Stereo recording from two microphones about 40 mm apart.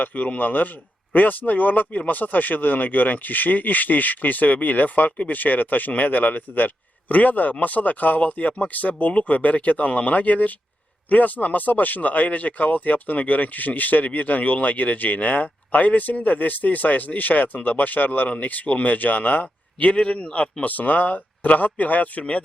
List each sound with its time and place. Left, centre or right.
0.0 s speech: left
19.8 s speech: left